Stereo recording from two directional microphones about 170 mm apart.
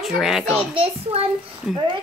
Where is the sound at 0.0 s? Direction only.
Centre (ahead or behind).